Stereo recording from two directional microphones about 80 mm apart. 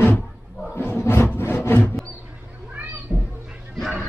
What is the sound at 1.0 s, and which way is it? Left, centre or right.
Rub, left.